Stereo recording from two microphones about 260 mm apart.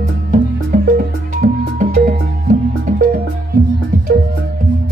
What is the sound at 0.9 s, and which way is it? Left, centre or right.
Music, right.